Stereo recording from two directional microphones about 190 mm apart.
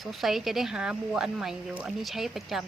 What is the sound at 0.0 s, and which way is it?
Speech, centre (ahead or behind).